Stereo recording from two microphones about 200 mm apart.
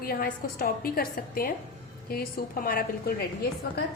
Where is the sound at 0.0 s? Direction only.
45° left (ahead or behind).